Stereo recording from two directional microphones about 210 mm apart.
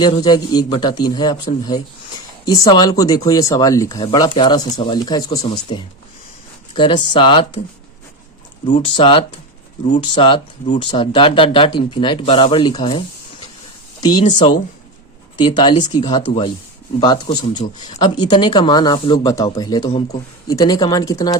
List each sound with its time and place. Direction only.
0.0 s speech: 20° left (ahead or behind)
8.6 s speech: 25° left (ahead or behind)